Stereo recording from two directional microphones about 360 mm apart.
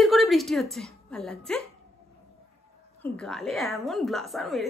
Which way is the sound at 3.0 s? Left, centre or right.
Centre.